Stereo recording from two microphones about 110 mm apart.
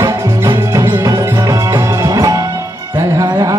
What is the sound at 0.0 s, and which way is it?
Music, 30° right (ahead or behind).